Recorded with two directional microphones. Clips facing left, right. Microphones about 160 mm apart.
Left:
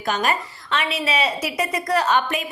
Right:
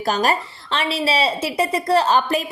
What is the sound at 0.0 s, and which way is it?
A woman's voice, 35° right (ahead or behind).